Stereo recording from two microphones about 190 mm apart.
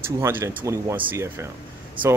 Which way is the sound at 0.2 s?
10° right (ahead or behind).